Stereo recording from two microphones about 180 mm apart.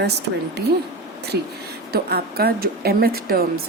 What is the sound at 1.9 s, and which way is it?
Speech, 60° right (ahead or behind).